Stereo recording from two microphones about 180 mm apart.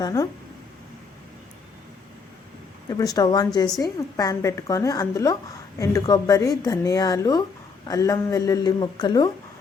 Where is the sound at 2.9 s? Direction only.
20° left (ahead or behind).